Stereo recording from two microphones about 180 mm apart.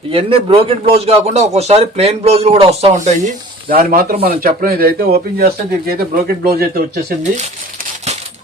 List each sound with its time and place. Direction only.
0.1 s speech: 30° right (ahead or behind); by 7.0 s 60° right (ahead or behind)